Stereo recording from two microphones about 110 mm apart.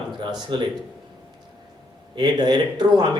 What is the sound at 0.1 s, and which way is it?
Speech, 45° right (ahead or behind).